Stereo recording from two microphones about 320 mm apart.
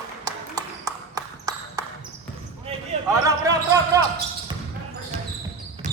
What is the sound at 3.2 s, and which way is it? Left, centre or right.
Basketball bounce, centre.